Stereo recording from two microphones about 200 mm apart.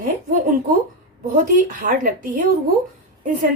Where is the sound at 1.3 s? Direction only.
45° right (ahead or behind).